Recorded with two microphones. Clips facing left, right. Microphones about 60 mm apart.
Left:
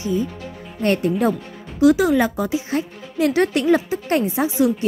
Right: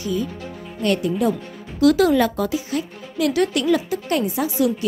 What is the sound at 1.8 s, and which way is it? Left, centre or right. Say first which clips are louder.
A woman's voice: even; centre.